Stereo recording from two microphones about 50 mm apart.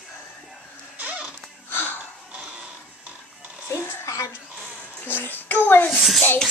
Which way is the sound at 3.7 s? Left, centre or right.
Left.